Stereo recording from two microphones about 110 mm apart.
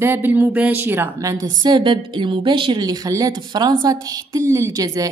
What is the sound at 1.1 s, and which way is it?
A woman's voice, 35° right (ahead or behind).